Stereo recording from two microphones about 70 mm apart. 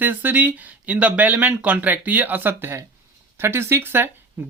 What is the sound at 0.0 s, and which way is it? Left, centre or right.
Speech, right.